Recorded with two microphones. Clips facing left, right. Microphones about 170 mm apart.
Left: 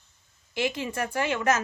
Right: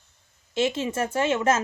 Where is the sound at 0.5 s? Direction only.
25° right (ahead or behind).